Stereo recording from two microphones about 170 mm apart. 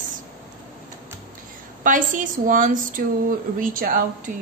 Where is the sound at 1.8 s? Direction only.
50° right (ahead or behind).